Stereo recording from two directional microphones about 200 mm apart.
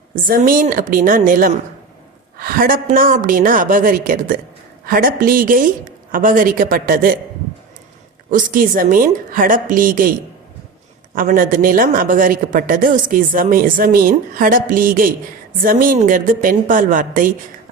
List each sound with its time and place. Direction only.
0.3 s a woman's voice: 45° right (ahead or behind)
8.3 s a woman's voice: 40° right (ahead or behind)